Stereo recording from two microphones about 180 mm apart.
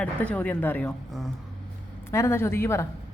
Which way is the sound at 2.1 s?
15° left (ahead or behind).